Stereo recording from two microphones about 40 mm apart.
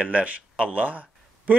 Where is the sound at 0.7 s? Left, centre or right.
Right.